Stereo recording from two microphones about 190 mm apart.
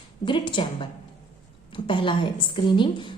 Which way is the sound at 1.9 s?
25° left (ahead or behind).